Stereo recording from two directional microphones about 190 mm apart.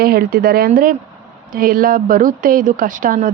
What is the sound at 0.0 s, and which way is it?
Speech, 55° right (ahead or behind).